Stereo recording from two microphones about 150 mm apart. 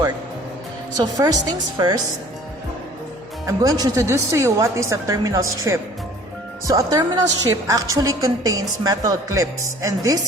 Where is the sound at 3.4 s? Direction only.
25° right (ahead or behind).